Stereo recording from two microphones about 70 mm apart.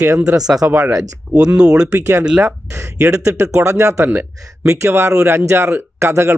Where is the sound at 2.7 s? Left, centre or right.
Right.